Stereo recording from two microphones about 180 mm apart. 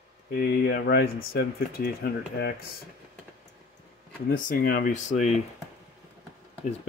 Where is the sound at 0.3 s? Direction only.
55° left (ahead or behind).